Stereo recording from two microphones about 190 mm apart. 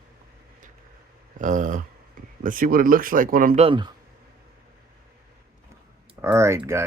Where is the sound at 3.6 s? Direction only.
25° right (ahead or behind).